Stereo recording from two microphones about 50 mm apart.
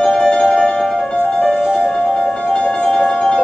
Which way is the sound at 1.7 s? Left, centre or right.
Centre.